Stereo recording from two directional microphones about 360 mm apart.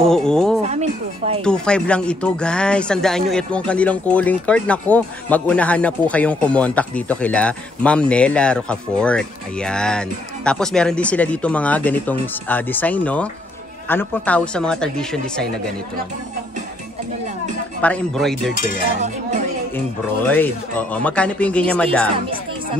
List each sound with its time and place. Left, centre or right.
0.0 s speech: centre
0.7 s speech: centre
1.4 s speech: centre
17.8 s speech: centre
18.9 s speech: centre
20.2 s speech: centre